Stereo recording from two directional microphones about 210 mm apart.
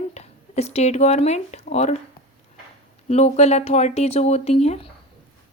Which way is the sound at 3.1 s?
30° left (ahead or behind).